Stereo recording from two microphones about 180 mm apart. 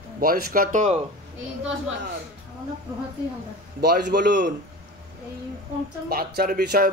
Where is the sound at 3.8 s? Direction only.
65° right (ahead or behind).